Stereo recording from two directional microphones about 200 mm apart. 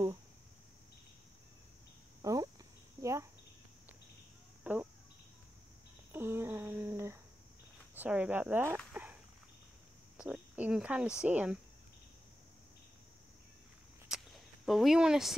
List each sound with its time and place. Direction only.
2.2 s cricket: 15° right (ahead or behind)
4.7 s speech: 10° right (ahead or behind)
6.1 s a sound: 10° right (ahead or behind)
7.9 s speech: 5° right (ahead or behind)
10.1 s speech: 5° right (ahead or behind)
14.0 s a sound: centre (ahead or behind)